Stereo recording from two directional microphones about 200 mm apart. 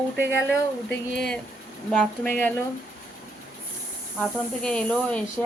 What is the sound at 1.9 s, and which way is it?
Speech, 5° left (ahead or behind).